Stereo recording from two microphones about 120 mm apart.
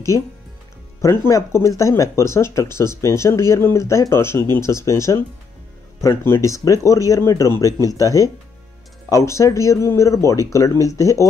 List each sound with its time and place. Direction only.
1.0 s speech: 25° left (ahead or behind)